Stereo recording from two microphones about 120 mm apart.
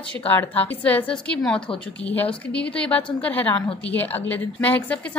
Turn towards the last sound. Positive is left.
turn(degrees=10)  # may be behind; listen again after turning